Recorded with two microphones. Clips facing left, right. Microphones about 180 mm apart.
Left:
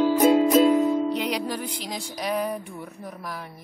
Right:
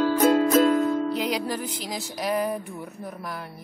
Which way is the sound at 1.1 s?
Centre (ahead or behind).